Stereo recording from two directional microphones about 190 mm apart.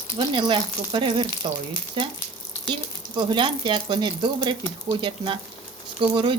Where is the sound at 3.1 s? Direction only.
25° right (ahead or behind).